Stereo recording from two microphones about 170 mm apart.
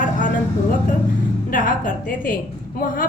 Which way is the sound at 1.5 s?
55° left (ahead or behind).